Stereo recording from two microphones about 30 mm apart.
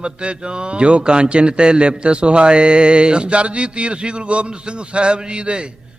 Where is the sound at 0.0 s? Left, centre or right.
Right.